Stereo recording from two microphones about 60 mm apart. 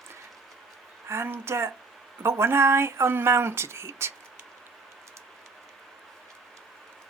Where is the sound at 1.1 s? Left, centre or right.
Right.